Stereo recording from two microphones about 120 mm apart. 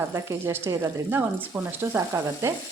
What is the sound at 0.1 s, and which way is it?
A woman's voice, 20° right (ahead or behind).